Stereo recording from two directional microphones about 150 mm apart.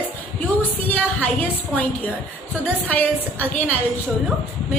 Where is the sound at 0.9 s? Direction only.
10° left (ahead or behind).